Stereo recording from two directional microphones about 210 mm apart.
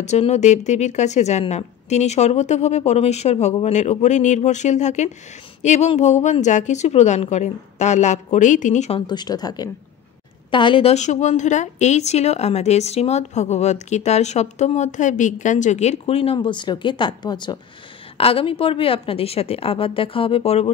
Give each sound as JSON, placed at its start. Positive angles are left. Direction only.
{"t": 0.0, "sound": "a woman's voice", "side_deg": 35}
{"t": 9.0, "sound": "a woman's voice", "side_deg": 20}